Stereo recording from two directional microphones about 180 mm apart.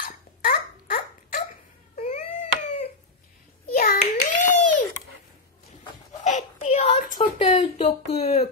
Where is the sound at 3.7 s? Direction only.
55° left (ahead or behind).